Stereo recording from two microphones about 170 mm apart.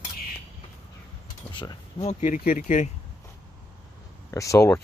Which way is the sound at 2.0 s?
45° left (ahead or behind).